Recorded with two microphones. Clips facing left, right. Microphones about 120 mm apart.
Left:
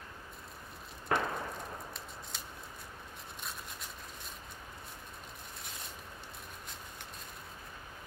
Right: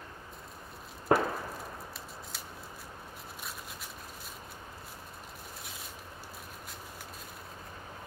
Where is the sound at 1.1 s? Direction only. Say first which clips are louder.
Right 6 dB; 30° right (ahead or behind).